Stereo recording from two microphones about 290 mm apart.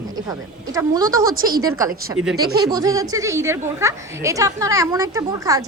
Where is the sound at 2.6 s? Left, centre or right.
Centre.